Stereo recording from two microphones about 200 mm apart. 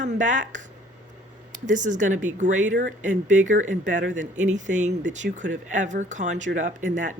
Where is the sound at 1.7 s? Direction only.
40° right (ahead or behind).